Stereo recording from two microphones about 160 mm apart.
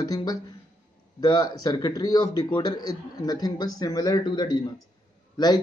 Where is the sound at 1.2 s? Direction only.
25° left (ahead or behind).